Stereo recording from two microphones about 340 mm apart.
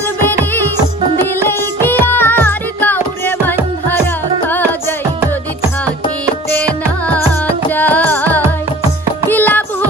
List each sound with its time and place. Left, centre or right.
1.2 s music: centre
7.7 s music: centre